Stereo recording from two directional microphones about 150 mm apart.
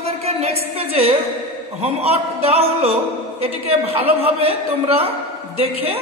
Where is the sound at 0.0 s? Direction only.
45° right (ahead or behind).